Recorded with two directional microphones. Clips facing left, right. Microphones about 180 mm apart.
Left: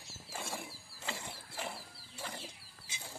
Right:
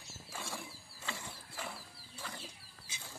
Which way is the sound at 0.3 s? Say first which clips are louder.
Left 2 dB; 25° left (ahead or behind).